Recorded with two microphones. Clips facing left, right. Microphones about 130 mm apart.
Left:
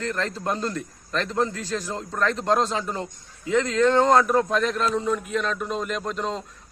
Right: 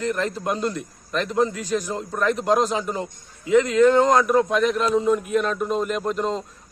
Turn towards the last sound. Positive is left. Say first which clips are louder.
# right 4 dB
turn(degrees=0)  # may be behind; listen again after turning